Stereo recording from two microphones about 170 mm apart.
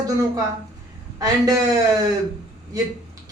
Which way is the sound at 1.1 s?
20° right (ahead or behind).